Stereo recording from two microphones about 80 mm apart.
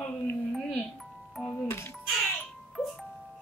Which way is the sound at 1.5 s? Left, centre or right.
Left.